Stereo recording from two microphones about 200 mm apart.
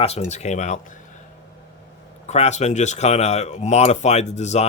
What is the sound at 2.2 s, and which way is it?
Speech, 35° left (ahead or behind).